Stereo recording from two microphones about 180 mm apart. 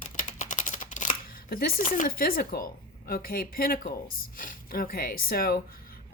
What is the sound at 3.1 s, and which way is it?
Speech, 55° left (ahead or behind).